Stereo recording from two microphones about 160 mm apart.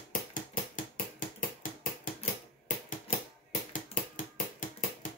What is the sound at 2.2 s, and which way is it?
Typewriter, 50° left (ahead or behind).